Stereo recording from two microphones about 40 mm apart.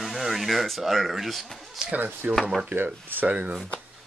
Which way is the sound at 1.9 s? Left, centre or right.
Right.